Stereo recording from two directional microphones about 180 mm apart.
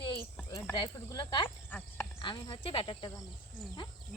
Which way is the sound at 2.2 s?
25° left (ahead or behind).